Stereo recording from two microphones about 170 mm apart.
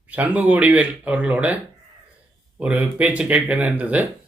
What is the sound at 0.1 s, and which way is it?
Speech, 10° right (ahead or behind).